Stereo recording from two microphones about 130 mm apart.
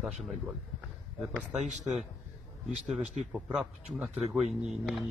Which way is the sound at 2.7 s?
5° right (ahead or behind).